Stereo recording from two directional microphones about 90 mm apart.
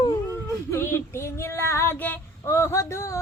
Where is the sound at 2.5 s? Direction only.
35° left (ahead or behind).